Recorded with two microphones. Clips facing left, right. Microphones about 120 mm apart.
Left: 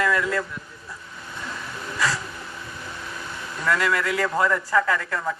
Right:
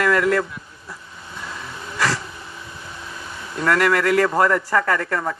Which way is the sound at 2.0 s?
75° right (ahead or behind).